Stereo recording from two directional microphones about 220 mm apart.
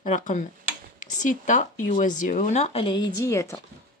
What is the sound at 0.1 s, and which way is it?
Speech, 35° left (ahead or behind).